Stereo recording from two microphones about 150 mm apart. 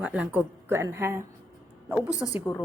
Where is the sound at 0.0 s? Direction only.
10° right (ahead or behind).